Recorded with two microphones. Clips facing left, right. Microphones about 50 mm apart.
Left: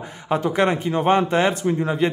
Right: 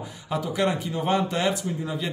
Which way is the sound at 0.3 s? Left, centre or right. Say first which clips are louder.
Left 6 dB; left.